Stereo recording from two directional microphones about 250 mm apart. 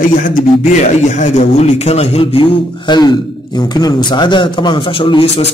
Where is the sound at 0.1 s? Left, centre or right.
Left.